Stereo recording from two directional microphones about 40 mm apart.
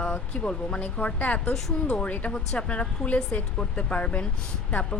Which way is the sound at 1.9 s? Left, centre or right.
Left.